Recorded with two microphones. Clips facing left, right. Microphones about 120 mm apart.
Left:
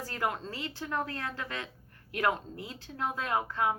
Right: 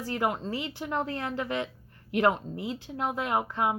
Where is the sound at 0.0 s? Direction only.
20° right (ahead or behind).